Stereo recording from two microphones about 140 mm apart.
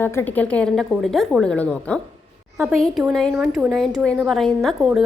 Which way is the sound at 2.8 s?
Centre (ahead or behind).